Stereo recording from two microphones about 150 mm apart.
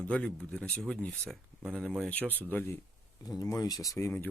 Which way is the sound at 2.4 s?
10° left (ahead or behind).